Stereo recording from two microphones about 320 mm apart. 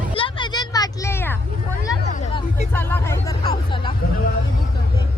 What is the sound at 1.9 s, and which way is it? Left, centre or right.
Hubbub, centre.